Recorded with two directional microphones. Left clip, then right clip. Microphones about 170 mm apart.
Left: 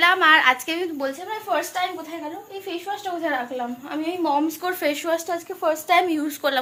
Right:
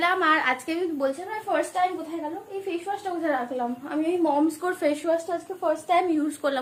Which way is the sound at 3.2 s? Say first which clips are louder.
Even; 20° right (ahead or behind).